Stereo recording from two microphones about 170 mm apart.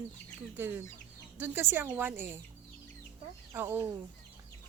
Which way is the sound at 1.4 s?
10° right (ahead or behind).